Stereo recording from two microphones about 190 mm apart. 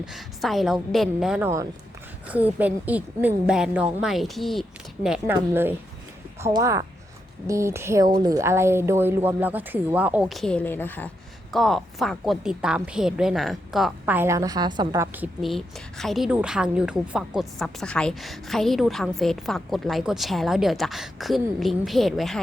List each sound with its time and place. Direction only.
0.0 s a woman's voice: centre (ahead or behind)